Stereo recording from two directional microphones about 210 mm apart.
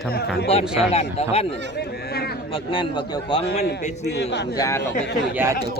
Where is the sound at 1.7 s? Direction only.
50° left (ahead or behind).